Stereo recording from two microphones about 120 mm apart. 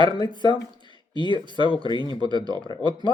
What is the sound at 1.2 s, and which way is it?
Speech, 40° left (ahead or behind).